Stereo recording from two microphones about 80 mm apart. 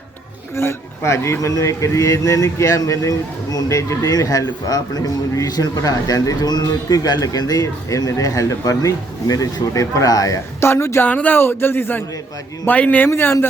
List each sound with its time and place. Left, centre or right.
0.5 s a man's voice: left
10.7 s speech: left
11.0 s speech: left
13.1 s speech: left